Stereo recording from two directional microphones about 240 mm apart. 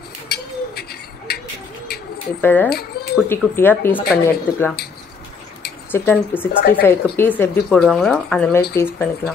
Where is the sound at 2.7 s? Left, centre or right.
Left.